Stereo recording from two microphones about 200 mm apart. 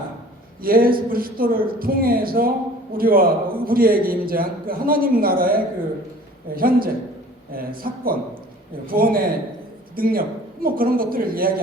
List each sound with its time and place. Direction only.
0.6 s a man's voice: 45° right (ahead or behind)